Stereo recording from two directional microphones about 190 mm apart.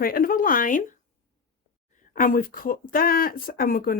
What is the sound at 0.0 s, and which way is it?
Speech, 50° left (ahead or behind).